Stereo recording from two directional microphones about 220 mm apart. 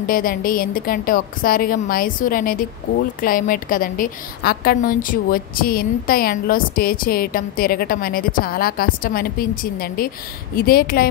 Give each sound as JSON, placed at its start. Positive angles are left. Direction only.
{"t": 0.0, "sound": "a woman's voice", "side_deg": 40}